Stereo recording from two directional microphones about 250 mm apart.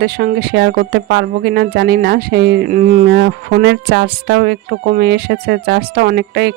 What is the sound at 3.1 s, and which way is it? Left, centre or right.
Speech, right.